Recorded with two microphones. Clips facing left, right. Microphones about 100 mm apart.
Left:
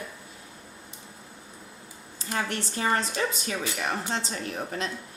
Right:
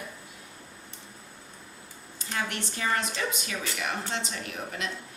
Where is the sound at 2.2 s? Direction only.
35° left (ahead or behind).